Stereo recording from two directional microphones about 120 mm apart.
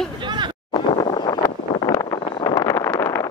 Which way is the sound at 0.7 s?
50° left (ahead or behind).